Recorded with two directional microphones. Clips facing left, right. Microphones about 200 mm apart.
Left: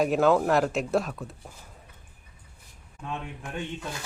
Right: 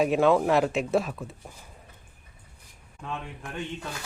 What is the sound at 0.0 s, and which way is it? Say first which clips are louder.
Speech: even; centre (ahead or behind).